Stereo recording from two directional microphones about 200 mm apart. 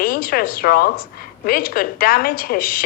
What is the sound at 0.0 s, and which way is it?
A woman's voice, 45° left (ahead or behind).